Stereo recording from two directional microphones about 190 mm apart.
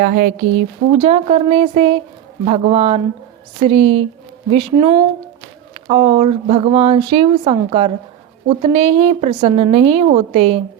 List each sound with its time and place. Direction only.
0.0 s speech: 55° right (ahead or behind)
0.9 s speech: 30° right (ahead or behind)